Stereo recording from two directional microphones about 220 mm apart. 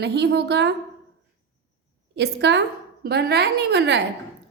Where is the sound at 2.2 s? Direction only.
50° right (ahead or behind).